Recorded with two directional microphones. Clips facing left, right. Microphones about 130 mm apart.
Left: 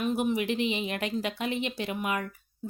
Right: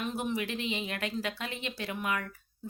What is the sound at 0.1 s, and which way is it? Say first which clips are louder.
Speech: left 6 dB; 15° left (ahead or behind).